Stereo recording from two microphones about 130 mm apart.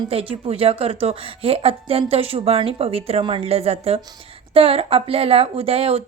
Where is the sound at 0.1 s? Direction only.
50° right (ahead or behind).